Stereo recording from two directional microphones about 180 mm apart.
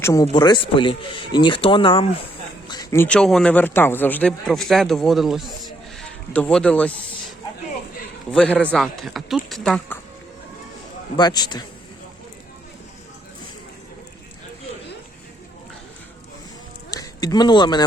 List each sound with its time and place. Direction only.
0.0 s speech: 20° left (ahead or behind)
2.6 s a man's voice: 20° left (ahead or behind); by 5.5 s centre (ahead or behind)
6.0 s a sound: 5° left (ahead or behind)
8.3 s a man's voice: 5° left (ahead or behind)
11.2 s speech: 20° left (ahead or behind)
16.9 s speech: 20° left (ahead or behind)